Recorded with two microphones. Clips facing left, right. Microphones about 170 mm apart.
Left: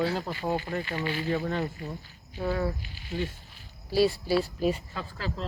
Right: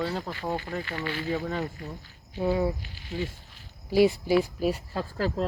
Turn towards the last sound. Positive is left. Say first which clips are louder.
# right 7 dB
turn(degrees=-45)  # may be behind; listen again after turning